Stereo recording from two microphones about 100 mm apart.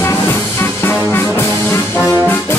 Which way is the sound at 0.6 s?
25° left (ahead or behind).